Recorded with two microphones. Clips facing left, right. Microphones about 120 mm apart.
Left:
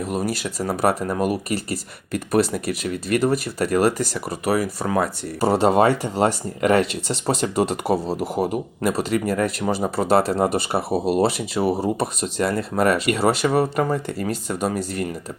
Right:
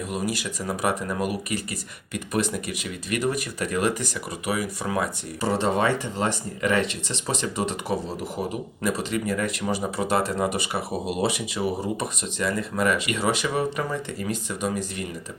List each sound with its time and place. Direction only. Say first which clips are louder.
0.1 s speech: left 4 dB; 35° left (ahead or behind)
8.4 s speech: left 7 dB; 60° left (ahead or behind)
8.9 s speech: left 4 dB; 40° left (ahead or behind)
9.8 s speech: left 7 dB; 35° left (ahead or behind)